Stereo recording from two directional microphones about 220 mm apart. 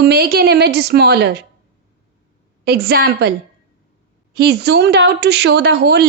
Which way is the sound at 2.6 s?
45° right (ahead or behind).